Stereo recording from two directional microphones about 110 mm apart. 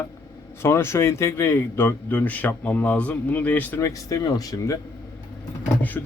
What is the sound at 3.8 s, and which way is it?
Speech, 30° left (ahead or behind).